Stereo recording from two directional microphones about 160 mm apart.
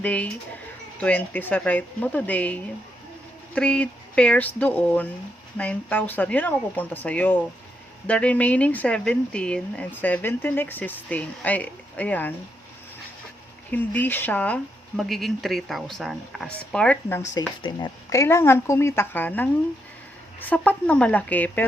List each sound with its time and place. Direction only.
0.0 s speech: 10° left (ahead or behind)
13.7 s speech: 10° left (ahead or behind)